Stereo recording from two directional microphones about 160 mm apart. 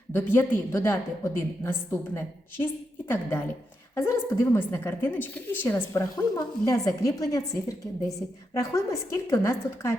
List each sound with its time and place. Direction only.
0.1 s a woman's voice: 15° left (ahead or behind)